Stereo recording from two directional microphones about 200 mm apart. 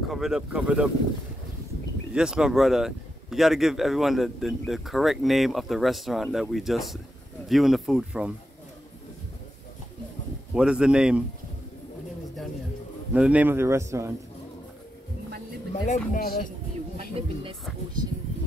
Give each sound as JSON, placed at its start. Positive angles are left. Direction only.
{"t": 0.1, "sound": "speech", "side_deg": 0}
{"t": 2.1, "sound": "speech", "side_deg": -5}
{"t": 10.5, "sound": "speech", "side_deg": -5}
{"t": 13.1, "sound": "speech", "side_deg": -5}
{"t": 15.7, "sound": "speech", "side_deg": 35}
{"t": 16.9, "sound": "speech", "side_deg": -30}